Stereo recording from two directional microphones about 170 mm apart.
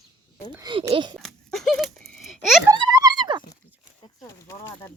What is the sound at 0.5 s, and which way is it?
Speech, 25° right (ahead or behind).